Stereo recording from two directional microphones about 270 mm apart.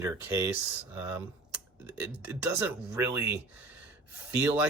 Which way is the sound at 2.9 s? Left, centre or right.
Centre.